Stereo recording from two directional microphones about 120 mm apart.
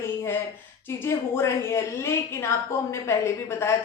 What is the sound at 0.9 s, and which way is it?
A man's voice, 20° left (ahead or behind).